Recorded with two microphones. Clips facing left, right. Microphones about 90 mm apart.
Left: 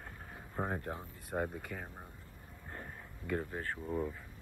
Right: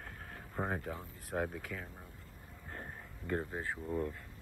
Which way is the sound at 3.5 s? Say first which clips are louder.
Even; 15° right (ahead or behind).